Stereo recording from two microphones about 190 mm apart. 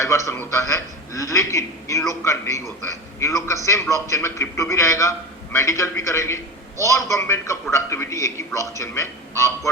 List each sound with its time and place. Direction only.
0.0 s a man's voice: 15° left (ahead or behind)